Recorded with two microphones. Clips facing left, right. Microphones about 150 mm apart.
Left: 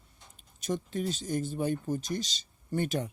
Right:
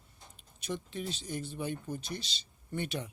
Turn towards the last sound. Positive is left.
turn(degrees=45)  # may be behind; listen again after turning